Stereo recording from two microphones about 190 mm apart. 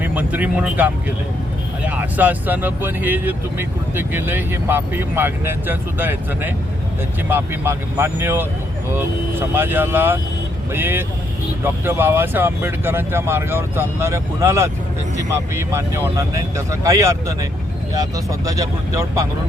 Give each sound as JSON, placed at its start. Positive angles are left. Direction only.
{"t": 0.0, "sound": "speech", "side_deg": -10}